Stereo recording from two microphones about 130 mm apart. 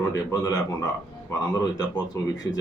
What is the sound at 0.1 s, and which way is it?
Speech, 25° left (ahead or behind).